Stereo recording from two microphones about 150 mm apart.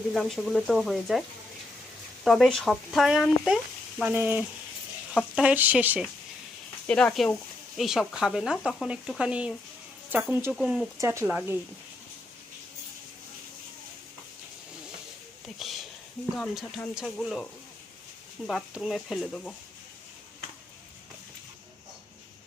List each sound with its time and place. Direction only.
0.1 s speech: centre (ahead or behind)
2.2 s speech: centre (ahead or behind)
6.8 s speech: 5° left (ahead or behind)
11.0 s speech: 20° right (ahead or behind)
15.5 s a sound: centre (ahead or behind)
16.4 s speech: 5° left (ahead or behind)